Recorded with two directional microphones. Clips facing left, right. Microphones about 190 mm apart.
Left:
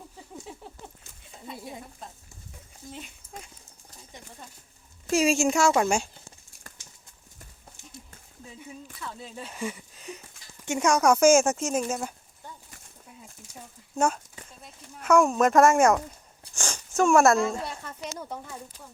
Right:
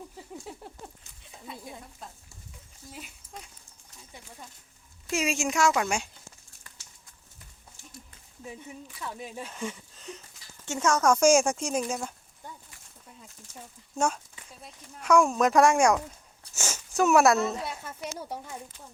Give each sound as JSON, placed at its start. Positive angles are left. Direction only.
{"t": 1.2, "sound": "a sound", "side_deg": 0}
{"t": 2.9, "sound": "speech", "side_deg": -5}
{"t": 5.0, "sound": "speech", "side_deg": 35}
{"t": 9.0, "sound": "speech", "side_deg": -15}
{"t": 9.5, "sound": "a sound", "side_deg": 10}
{"t": 10.7, "sound": "speech", "side_deg": 15}
{"t": 13.9, "sound": "speech", "side_deg": 0}